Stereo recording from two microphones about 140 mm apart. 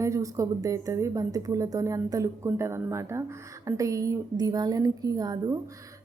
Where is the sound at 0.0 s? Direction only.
20° right (ahead or behind).